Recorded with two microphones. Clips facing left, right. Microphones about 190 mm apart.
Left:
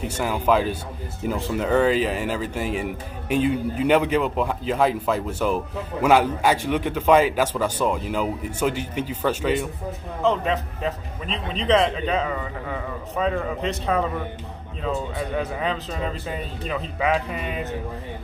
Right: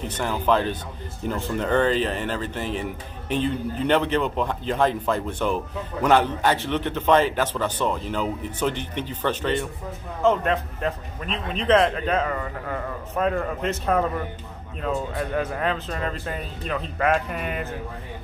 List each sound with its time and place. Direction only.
0.0 s a man's voice: 10° left (ahead or behind)